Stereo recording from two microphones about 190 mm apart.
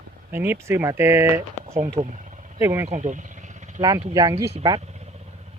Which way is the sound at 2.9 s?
40° right (ahead or behind).